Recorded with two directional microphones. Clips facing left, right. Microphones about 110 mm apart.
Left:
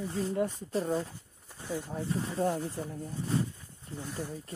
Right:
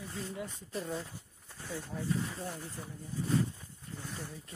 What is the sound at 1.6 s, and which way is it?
Speech, 15° left (ahead or behind).